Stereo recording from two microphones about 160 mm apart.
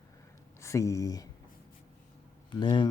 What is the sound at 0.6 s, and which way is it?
Speech, 20° left (ahead or behind).